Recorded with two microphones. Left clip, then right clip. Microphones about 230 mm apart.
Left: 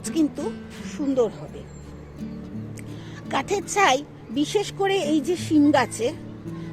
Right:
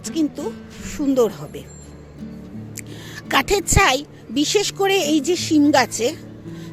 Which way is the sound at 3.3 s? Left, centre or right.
Right.